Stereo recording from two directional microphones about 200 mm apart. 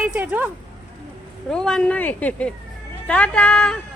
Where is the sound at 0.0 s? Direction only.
5° right (ahead or behind).